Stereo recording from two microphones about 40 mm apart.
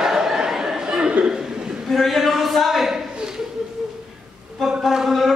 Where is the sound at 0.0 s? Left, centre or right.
Centre.